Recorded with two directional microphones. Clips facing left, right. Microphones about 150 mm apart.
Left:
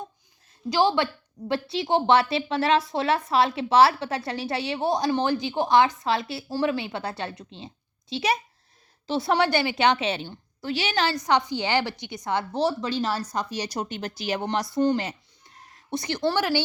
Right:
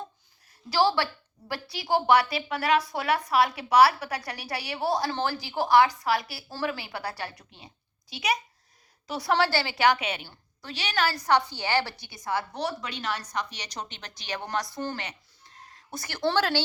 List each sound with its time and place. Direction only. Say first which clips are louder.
0.7 s a woman's voice: left 2 dB; 20° left (ahead or behind)
14.8 s a sound: left 11 dB; 20° left (ahead or behind)
16.2 s speech: left 1 dB; 10° left (ahead or behind)